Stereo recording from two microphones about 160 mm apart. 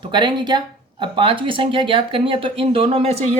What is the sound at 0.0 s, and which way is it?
Speech, 30° right (ahead or behind).